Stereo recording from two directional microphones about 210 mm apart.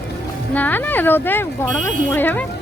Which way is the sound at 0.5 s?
10° left (ahead or behind).